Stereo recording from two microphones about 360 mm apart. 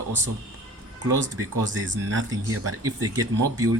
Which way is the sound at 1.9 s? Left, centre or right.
Right.